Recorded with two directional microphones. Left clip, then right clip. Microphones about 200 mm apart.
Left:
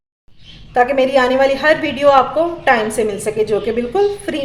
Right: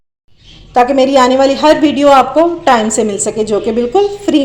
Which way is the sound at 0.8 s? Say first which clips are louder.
Right 5 dB; 25° right (ahead or behind).